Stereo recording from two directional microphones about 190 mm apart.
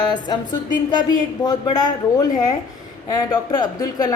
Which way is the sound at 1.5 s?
20° left (ahead or behind).